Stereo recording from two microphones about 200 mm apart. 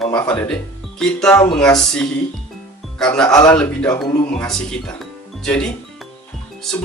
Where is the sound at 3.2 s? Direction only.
20° left (ahead or behind).